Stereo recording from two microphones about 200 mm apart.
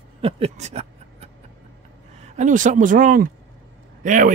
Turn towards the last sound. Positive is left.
turn(degrees=-40)  # may be behind; listen again after turning